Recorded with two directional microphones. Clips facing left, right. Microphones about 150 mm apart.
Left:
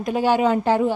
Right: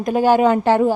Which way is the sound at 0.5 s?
65° right (ahead or behind).